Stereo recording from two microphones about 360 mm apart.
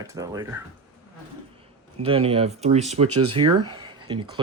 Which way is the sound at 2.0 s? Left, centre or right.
Centre.